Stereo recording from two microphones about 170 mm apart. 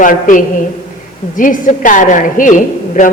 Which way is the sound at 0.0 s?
50° left (ahead or behind).